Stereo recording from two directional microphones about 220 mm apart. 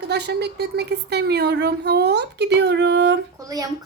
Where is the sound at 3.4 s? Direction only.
15° right (ahead or behind).